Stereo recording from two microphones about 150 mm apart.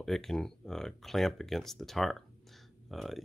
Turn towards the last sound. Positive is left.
turn(degrees=0)  # may be behind; listen again after turning